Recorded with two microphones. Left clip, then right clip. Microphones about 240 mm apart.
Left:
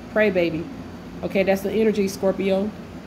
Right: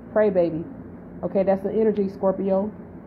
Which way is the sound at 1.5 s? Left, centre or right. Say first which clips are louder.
Left 1 dB; centre.